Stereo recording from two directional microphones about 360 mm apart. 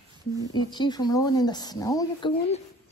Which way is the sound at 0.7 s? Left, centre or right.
Centre.